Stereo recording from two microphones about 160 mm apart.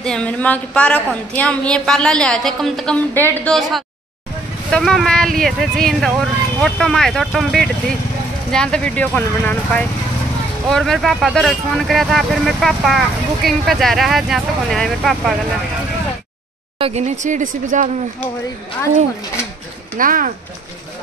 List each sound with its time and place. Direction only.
0.0 s a woman's voice: 5° left (ahead or behind)
16.7 s speech: 40° right (ahead or behind)
20.0 s speech: 60° right (ahead or behind)